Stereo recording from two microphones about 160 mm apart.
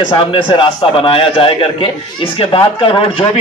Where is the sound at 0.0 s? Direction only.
30° left (ahead or behind).